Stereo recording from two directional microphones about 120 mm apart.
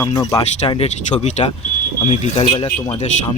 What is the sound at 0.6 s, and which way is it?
Speech, 55° left (ahead or behind).